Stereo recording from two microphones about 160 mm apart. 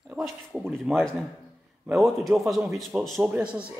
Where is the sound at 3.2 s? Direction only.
10° right (ahead or behind).